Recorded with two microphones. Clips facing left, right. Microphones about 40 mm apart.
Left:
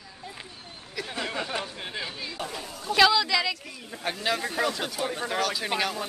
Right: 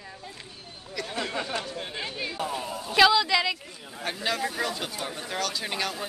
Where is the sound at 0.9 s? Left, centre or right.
Centre.